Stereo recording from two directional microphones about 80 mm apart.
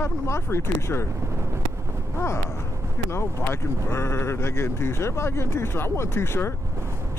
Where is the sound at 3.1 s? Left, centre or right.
Left.